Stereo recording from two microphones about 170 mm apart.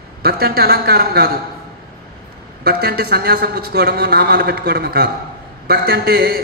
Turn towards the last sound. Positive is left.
turn(degrees=-65)  # may be behind; listen again after turning